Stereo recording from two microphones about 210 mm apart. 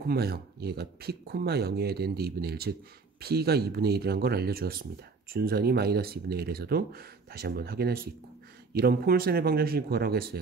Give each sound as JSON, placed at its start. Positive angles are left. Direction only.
{"t": 0.0, "sound": "speech", "side_deg": -50}